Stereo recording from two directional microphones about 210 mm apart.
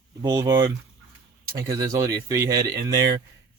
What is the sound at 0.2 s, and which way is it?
Speech, 15° right (ahead or behind).